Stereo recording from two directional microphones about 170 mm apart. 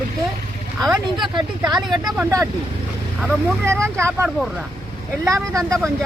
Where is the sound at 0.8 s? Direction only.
5° right (ahead or behind).